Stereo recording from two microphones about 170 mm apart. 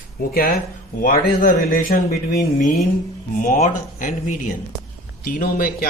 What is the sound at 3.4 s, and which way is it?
A man's voice, 50° left (ahead or behind).